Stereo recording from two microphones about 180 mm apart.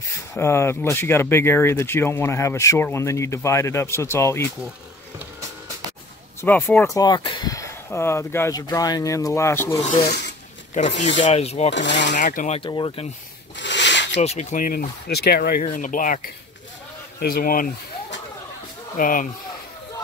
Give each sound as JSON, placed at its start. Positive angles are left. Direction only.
{"t": 0.3, "sound": "speech", "side_deg": 15}
{"t": 6.4, "sound": "speech", "side_deg": 10}
{"t": 10.7, "sound": "speech", "side_deg": 40}
{"t": 11.7, "sound": "speech", "side_deg": 80}
{"t": 12.1, "sound": "speech", "side_deg": 45}
{"t": 12.5, "sound": "speech", "side_deg": 25}
{"t": 13.6, "sound": "rub", "side_deg": 80}
{"t": 14.1, "sound": "speech", "side_deg": 35}
{"t": 15.6, "sound": "speech", "side_deg": 45}
{"t": 18.9, "sound": "speech", "side_deg": 50}